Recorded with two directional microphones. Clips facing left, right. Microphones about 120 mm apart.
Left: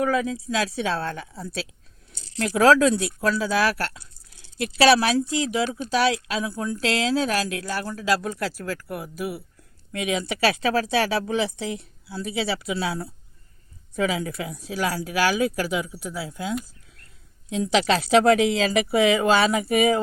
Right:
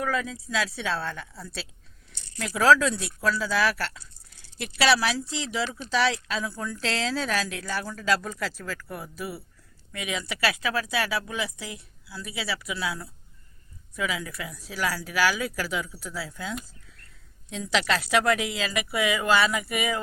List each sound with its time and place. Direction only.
0.0 s a woman's voice: 15° left (ahead or behind)